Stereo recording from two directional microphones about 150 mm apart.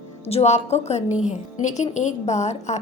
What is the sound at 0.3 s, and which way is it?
A woman's voice, 45° left (ahead or behind).